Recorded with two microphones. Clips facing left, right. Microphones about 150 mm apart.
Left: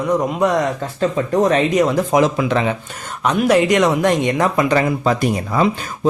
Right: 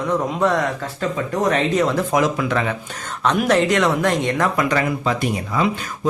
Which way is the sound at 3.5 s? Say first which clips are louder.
Left 4 dB; 15° left (ahead or behind).